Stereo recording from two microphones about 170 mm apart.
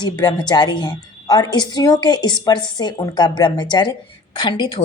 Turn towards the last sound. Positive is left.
turn(degrees=30)  # may be behind; listen again after turning